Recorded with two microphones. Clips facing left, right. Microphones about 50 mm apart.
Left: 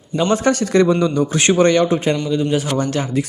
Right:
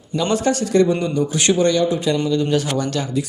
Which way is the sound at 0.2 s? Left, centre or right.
Left.